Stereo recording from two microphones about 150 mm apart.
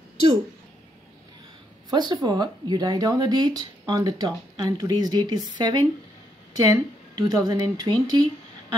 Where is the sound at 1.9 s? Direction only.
30° right (ahead or behind).